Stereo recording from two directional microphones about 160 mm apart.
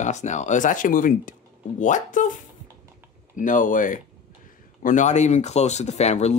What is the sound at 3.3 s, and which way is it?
Speech, 55° left (ahead or behind).